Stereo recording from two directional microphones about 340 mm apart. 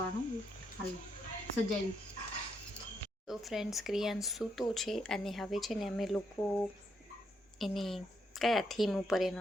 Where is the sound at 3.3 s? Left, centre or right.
Centre.